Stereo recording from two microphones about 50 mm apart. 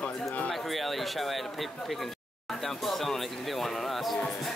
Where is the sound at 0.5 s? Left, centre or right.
Centre.